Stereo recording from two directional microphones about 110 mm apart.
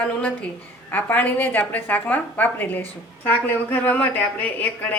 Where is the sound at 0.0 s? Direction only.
15° left (ahead or behind).